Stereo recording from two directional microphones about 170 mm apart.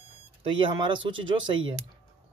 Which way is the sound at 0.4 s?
30° right (ahead or behind).